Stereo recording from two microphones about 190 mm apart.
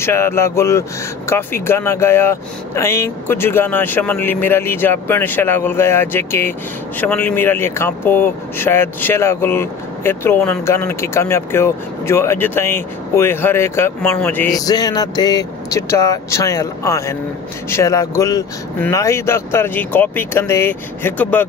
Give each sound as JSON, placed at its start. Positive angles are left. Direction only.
{"t": 0.0, "sound": "speech", "side_deg": 15}
{"t": 14.7, "sound": "speech", "side_deg": 20}